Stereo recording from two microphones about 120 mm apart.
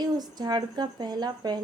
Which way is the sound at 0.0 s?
35° right (ahead or behind).